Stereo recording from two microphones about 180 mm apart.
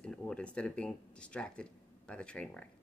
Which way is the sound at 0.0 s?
5° left (ahead or behind).